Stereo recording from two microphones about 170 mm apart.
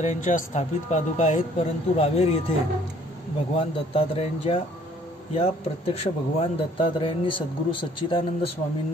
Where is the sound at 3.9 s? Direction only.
35° left (ahead or behind).